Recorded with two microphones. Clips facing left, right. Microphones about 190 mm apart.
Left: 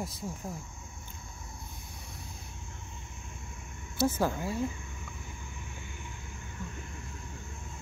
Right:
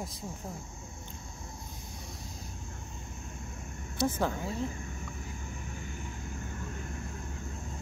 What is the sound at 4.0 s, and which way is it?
Speech, 5° left (ahead or behind).